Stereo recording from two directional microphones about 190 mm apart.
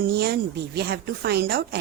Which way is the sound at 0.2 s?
60° right (ahead or behind).